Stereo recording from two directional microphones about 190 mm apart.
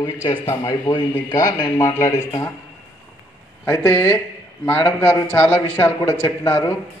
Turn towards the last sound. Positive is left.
turn(degrees=15)  # may be behind; listen again after turning